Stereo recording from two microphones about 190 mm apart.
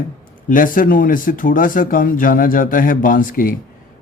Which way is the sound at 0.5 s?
45° left (ahead or behind).